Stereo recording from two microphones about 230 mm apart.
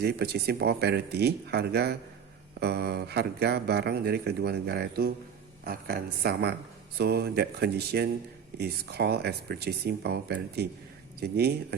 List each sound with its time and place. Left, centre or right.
0.0 s speech: right